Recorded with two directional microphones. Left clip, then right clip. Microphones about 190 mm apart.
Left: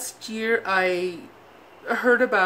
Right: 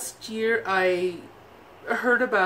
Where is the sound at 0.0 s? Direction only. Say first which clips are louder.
Right 1 dB; 35° left (ahead or behind).